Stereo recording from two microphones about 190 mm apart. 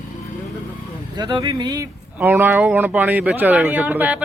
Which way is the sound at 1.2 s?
25° right (ahead or behind).